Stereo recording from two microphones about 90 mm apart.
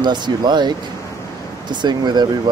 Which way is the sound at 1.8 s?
55° right (ahead or behind).